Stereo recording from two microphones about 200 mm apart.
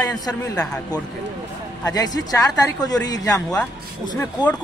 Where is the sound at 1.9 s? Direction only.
20° left (ahead or behind).